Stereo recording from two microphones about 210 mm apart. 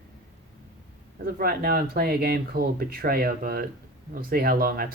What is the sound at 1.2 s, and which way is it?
Speech, 45° right (ahead or behind).